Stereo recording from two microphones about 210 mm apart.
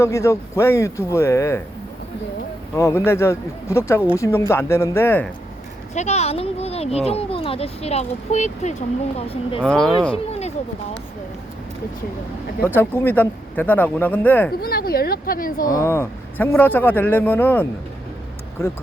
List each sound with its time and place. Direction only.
0.0 s speech: 15° left (ahead or behind)
2.7 s speech: 15° left (ahead or behind)
5.9 s speech: 35° left (ahead or behind)
9.6 s speech: 5° left (ahead or behind)
12.6 s speech: 10° left (ahead or behind)
14.6 s speech: 45° left (ahead or behind)
15.6 s speech: 15° left (ahead or behind)